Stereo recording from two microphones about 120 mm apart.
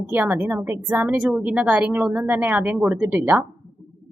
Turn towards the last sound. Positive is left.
turn(degrees=-15)  # may be behind; listen again after turning